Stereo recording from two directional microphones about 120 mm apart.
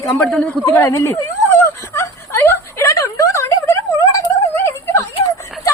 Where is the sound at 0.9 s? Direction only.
25° left (ahead or behind).